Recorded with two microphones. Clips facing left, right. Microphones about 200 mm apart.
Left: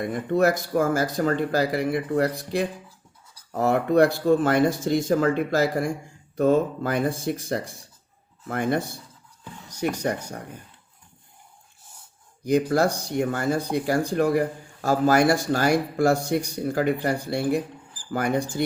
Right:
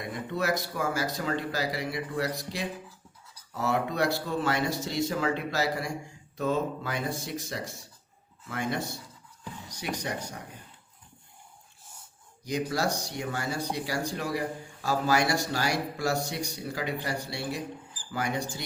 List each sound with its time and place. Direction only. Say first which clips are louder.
0.0 s speech: left 10 dB; 50° left (ahead or behind)
10.0 s speech: left 7 dB; 50° left (ahead or behind)
12.5 s speech: left 8 dB; 55° left (ahead or behind)